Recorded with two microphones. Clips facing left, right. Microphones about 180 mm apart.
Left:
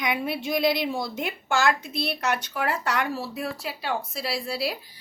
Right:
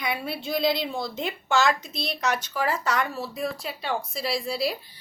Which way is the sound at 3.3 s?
5° left (ahead or behind).